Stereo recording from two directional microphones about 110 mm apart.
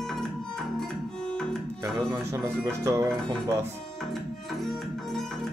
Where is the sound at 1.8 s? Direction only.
25° right (ahead or behind).